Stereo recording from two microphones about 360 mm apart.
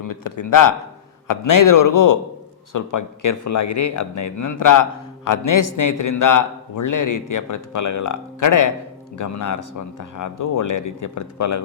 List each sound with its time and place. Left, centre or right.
0.0 s speech: left